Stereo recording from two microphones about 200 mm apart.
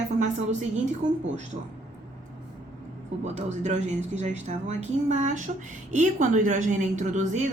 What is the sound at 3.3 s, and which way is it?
Speech, 35° right (ahead or behind).